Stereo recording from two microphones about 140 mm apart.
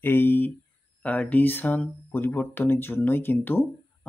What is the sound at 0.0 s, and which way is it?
Speech, 15° left (ahead or behind).